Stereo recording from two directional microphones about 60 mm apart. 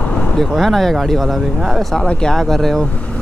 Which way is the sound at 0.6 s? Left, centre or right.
Centre.